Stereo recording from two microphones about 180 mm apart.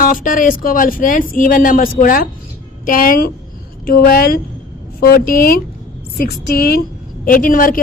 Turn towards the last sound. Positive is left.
turn(degrees=50)  # may be behind; listen again after turning